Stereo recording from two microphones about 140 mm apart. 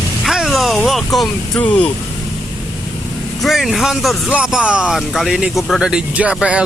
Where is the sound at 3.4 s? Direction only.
Centre (ahead or behind).